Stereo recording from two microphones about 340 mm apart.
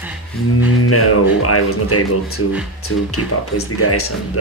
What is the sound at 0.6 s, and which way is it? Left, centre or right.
Speech, left.